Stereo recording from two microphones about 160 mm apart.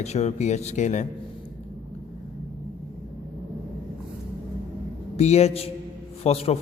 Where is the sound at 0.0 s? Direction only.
45° left (ahead or behind).